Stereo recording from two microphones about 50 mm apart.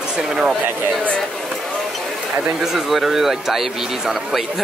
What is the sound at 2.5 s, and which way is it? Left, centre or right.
Speech, centre.